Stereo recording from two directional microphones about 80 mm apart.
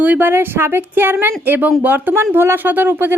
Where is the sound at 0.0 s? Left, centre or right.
Right.